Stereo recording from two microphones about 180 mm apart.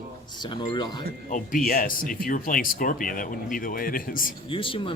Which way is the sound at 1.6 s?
55° left (ahead or behind).